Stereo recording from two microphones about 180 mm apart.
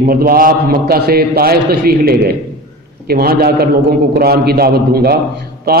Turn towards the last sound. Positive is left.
turn(degrees=-60)  # may be behind; listen again after turning